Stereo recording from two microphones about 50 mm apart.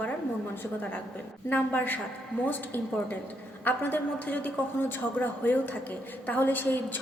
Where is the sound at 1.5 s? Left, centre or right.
Left.